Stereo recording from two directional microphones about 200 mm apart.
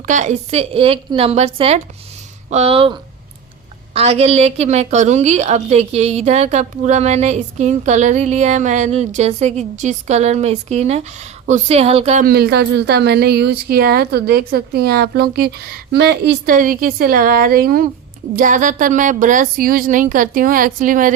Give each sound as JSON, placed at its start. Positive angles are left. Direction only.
{"t": 0.0, "sound": "a woman's voice", "side_deg": -40}
{"t": 12.2, "sound": "a woman's voice", "side_deg": -50}